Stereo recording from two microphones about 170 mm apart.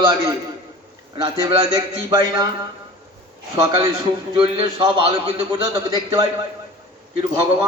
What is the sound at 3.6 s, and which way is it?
A man's voice, 30° right (ahead or behind).